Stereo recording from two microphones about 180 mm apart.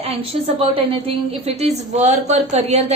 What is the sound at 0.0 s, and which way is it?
A woman's voice, 30° right (ahead or behind).